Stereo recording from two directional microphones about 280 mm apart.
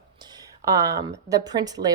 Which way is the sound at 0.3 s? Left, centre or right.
Centre.